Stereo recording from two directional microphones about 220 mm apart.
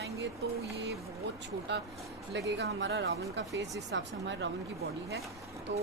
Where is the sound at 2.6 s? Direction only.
50° right (ahead or behind).